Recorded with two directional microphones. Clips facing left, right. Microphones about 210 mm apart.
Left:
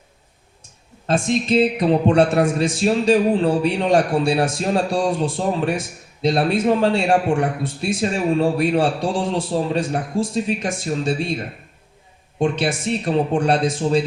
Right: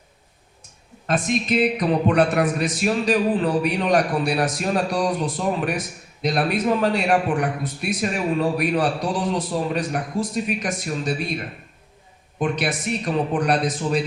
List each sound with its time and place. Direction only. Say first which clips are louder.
1.0 s a man's voice: left 3 dB; 25° left (ahead or behind)